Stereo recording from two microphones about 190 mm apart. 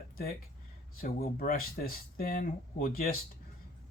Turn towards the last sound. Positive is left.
turn(degrees=50)  # may be behind; listen again after turning